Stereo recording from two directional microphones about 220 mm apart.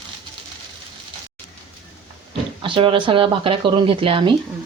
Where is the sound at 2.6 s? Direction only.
25° right (ahead or behind).